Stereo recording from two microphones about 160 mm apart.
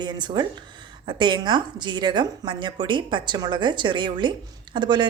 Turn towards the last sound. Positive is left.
turn(degrees=-30)  # may be behind; listen again after turning